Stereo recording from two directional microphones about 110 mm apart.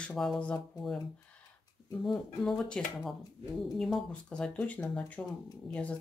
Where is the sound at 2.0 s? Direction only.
5° left (ahead or behind).